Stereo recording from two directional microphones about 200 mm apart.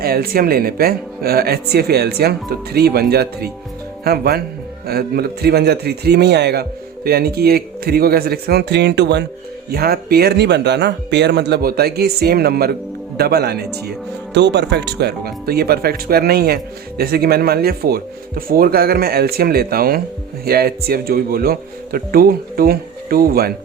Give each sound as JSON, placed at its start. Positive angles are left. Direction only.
{"t": 0.0, "sound": "a man's voice", "side_deg": -50}